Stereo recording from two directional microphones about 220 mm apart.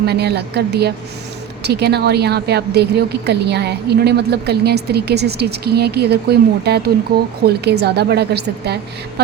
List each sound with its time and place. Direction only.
0.0 s a woman's voice: 45° right (ahead or behind)